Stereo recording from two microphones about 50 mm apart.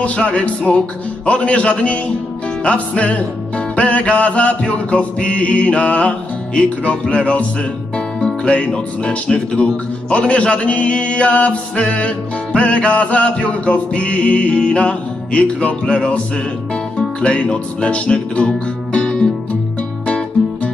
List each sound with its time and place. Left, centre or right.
0.0 s music: left
8.5 s music: left
17.2 s music: left